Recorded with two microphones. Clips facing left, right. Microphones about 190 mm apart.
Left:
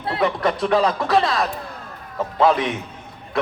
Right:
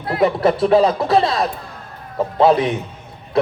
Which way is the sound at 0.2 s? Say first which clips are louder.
Right 6 dB; 25° right (ahead or behind).